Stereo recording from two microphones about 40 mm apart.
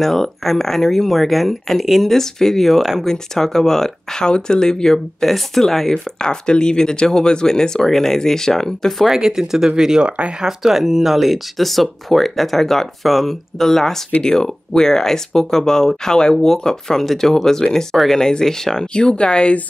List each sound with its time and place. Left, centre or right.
0.0 s speech: centre
5.9 s speech: left
9.1 s speech: centre
10.0 s speech: right
10.4 s speech: centre; by 19.5 s left